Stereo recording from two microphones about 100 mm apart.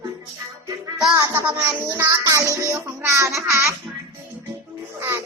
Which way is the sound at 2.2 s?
35° right (ahead or behind).